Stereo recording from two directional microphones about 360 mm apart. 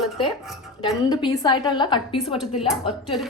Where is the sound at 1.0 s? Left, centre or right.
Centre.